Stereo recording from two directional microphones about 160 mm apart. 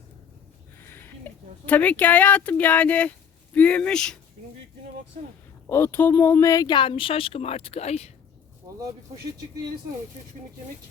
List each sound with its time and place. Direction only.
1.6 s speech: 10° left (ahead or behind)
5.6 s speech: 15° left (ahead or behind); by 8.1 s 40° left (ahead or behind)
8.7 s a sound: 20° right (ahead or behind)